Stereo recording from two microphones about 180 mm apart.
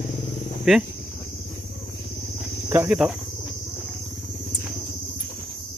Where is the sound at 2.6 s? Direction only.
10° right (ahead or behind).